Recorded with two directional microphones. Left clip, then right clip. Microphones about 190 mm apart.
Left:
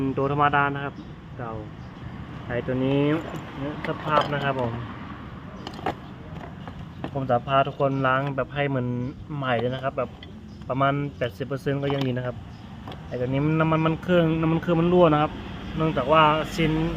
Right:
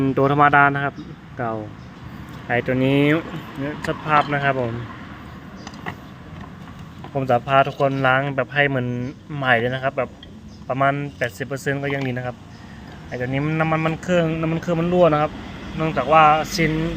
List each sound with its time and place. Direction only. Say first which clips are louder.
0.0 s speech: right 6 dB; 20° right (ahead or behind)
7.2 s speech: right 5 dB; 15° right (ahead or behind); by 16.5 s 10° left (ahead or behind)